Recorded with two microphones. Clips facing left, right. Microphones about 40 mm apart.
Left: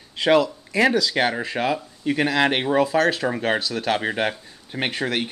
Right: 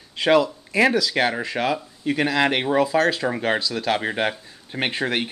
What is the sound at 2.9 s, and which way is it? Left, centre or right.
Speech, left.